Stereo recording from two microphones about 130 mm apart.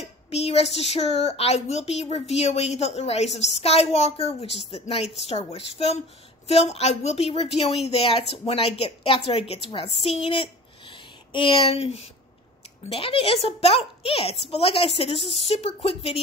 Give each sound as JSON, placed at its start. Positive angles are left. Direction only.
{"t": 0.3, "sound": "a woman's voice", "side_deg": 55}